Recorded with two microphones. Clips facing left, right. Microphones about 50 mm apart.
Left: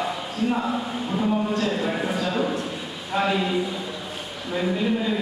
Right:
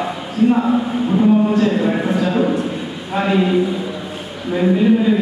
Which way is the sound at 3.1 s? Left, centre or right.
Centre.